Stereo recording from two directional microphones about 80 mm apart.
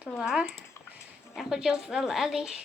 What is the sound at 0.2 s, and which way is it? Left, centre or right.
A woman's voice, centre.